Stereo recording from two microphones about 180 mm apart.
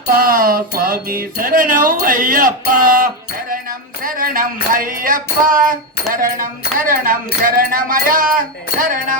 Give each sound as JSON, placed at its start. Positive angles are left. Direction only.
{"t": 0.1, "sound": "music", "side_deg": -50}